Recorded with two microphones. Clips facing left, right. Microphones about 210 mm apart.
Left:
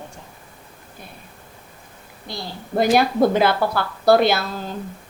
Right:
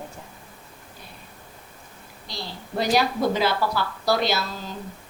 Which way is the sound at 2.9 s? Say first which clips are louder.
Left 4 dB; 55° left (ahead or behind).